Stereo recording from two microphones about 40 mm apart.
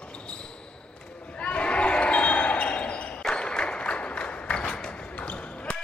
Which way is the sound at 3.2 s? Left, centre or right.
Left.